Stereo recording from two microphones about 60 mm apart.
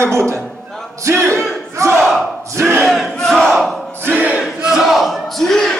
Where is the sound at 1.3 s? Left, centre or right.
Right.